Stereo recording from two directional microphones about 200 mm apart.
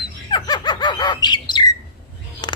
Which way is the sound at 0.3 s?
20° left (ahead or behind).